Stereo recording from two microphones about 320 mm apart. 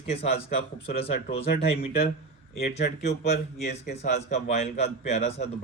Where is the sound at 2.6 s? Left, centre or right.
Left.